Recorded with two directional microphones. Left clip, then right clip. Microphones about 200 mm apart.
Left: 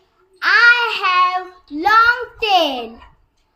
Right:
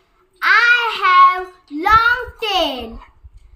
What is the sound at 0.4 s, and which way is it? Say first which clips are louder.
Child singing: left 1 dB; 5° right (ahead or behind).